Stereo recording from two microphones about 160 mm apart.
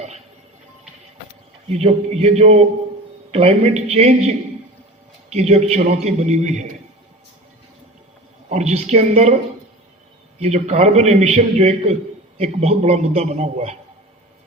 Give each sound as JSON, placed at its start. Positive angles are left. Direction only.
{"t": 1.6, "sound": "a man's voice", "side_deg": -40}
{"t": 8.4, "sound": "a man's voice", "side_deg": -45}
{"t": 10.4, "sound": "a man's voice", "side_deg": -45}